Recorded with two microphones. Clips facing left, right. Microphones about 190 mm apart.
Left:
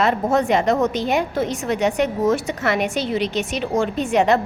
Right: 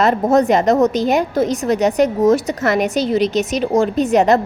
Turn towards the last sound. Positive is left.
turn(degrees=-40)  # may be behind; listen again after turning